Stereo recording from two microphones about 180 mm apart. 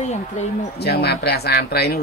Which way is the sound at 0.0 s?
40° left (ahead or behind).